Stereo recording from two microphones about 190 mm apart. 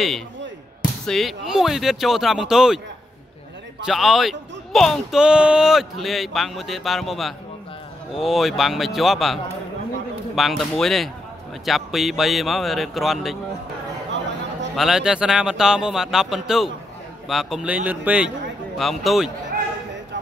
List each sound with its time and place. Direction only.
1.0 s speech: centre (ahead or behind)
3.8 s speech: centre (ahead or behind)
14.8 s speech: centre (ahead or behind)